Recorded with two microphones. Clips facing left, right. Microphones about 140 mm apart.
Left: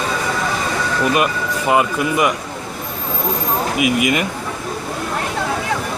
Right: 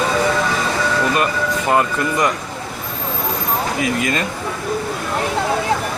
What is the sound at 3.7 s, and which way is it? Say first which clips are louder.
Speech: left 6 dB; 15° left (ahead or behind).